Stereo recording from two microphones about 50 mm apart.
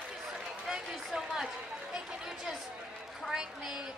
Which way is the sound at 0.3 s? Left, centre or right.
Centre.